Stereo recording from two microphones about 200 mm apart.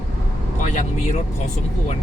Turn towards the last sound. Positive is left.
turn(degrees=35)  # may be behind; listen again after turning